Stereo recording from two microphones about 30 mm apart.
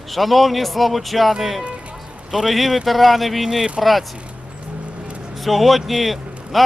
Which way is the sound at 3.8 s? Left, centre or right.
Centre.